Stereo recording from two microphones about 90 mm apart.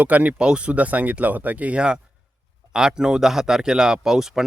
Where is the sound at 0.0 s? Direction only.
15° right (ahead or behind).